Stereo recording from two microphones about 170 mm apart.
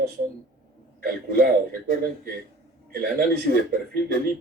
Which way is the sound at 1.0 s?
60° right (ahead or behind).